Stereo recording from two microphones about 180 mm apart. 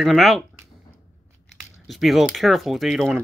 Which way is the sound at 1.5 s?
Centre (ahead or behind).